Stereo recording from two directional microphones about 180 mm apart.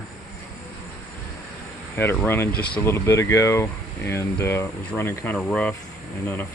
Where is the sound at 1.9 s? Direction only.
10° left (ahead or behind).